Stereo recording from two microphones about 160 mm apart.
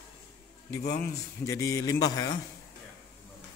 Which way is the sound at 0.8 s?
90° left.